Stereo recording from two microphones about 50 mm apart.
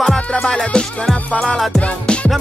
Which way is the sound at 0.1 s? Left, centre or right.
Centre.